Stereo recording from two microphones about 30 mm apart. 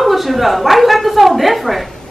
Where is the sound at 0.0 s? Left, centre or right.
Centre.